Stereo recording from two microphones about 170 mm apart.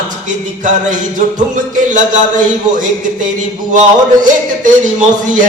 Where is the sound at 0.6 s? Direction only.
50° right (ahead or behind).